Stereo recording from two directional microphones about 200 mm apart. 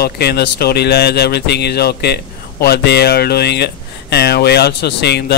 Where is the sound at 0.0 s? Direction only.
50° left (ahead or behind).